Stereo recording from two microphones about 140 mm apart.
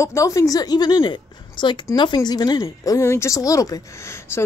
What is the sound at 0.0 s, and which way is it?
A woman's voice, 20° left (ahead or behind).